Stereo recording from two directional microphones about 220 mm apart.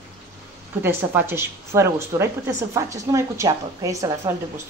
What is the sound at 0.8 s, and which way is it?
A woman's voice, 10° right (ahead or behind).